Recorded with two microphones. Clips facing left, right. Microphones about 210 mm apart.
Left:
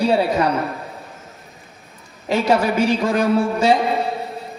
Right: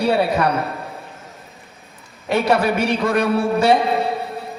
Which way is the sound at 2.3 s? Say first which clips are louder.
Even; 60° right (ahead or behind).